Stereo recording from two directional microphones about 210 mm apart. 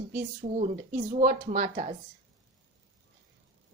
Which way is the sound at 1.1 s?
35° right (ahead or behind).